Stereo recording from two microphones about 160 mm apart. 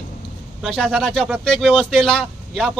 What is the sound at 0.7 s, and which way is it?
A man's voice, centre (ahead or behind).